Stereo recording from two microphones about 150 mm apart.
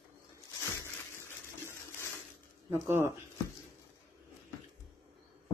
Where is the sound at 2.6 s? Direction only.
15° right (ahead or behind).